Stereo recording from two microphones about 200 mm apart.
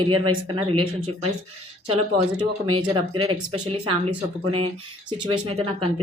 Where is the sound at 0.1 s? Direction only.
25° right (ahead or behind).